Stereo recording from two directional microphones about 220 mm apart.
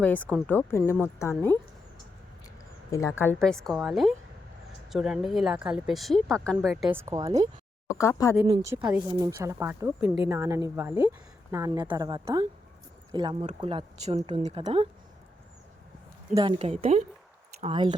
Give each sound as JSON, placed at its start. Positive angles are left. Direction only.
{"t": 0.0, "sound": "speech", "side_deg": 5}
{"t": 2.9, "sound": "speech", "side_deg": 15}
{"t": 6.9, "sound": "speech", "side_deg": -15}
{"t": 7.9, "sound": "speech", "side_deg": 15}
{"t": 8.4, "sound": "speech", "side_deg": -15}
{"t": 16.3, "sound": "speech", "side_deg": -20}